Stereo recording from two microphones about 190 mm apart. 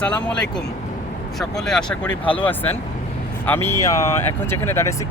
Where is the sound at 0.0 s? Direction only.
5° left (ahead or behind).